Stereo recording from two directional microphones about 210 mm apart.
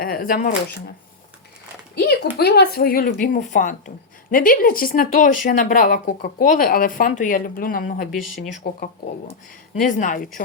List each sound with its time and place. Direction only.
0.0 s speech: 45° left (ahead or behind)
2.4 s speech: 50° left (ahead or behind)